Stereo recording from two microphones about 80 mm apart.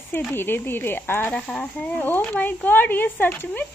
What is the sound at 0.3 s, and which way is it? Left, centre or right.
Speech, left.